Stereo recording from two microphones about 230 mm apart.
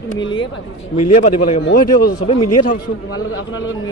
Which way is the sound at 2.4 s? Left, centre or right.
Left.